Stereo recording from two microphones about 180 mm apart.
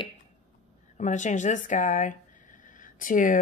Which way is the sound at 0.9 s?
40° left (ahead or behind).